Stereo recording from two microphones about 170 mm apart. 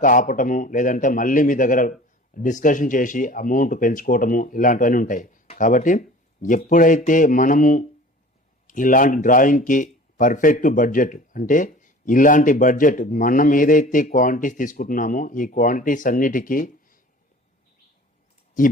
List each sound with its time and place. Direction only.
0.0 s speech: 50° left (ahead or behind)